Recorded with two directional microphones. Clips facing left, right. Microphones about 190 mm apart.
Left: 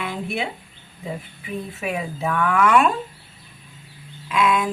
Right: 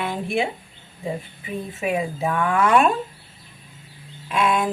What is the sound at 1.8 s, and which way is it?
Speech, 25° right (ahead or behind).